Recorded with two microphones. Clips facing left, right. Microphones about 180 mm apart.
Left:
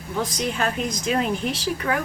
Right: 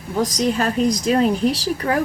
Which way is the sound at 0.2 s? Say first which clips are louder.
Right 6 dB; 40° right (ahead or behind).